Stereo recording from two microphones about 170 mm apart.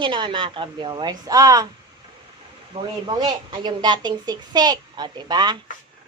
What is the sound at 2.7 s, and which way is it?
Speech, 25° right (ahead or behind).